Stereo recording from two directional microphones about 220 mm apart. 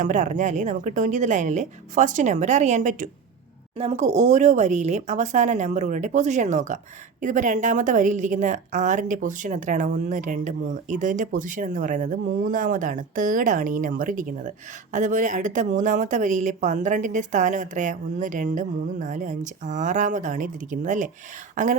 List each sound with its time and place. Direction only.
0.0 s a woman's voice: 35° right (ahead or behind)